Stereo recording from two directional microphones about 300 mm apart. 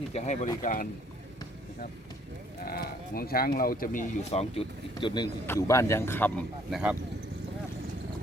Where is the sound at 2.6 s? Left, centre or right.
Left.